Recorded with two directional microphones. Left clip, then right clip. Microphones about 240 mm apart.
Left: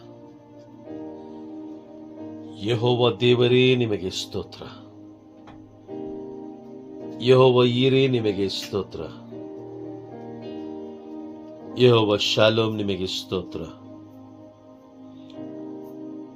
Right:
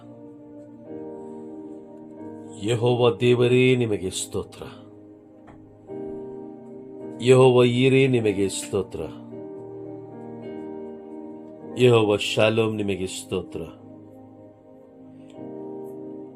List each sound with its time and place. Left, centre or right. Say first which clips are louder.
2.5 s music: even; centre
2.8 s speech: right 1 dB; centre
7.2 s speech: right 1 dB; centre
11.7 s a man's voice: even; centre